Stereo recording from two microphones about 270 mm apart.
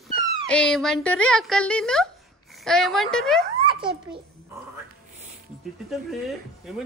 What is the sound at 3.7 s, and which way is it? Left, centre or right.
Babbling, centre.